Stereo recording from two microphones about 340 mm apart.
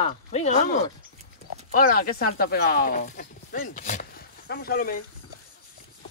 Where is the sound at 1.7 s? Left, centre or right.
Left.